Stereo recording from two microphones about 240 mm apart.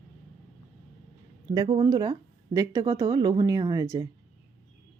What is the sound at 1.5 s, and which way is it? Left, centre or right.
Speech, centre.